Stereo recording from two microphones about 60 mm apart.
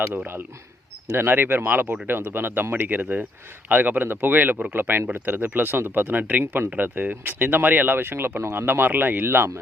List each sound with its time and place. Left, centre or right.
1.1 s speech: right